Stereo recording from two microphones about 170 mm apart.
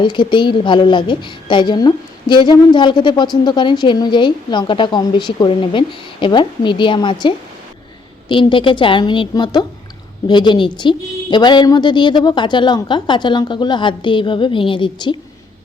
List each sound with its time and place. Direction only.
0.0 s speech: 30° left (ahead or behind)